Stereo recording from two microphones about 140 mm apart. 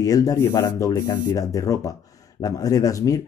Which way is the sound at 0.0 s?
25° left (ahead or behind).